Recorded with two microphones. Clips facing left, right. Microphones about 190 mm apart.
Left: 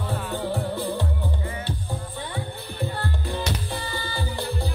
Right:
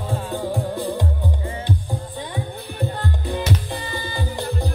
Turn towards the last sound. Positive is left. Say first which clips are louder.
# right 3 dB
turn(degrees=-15)  # may be behind; listen again after turning